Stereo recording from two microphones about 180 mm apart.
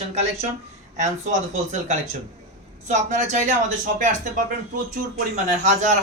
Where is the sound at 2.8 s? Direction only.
40° right (ahead or behind).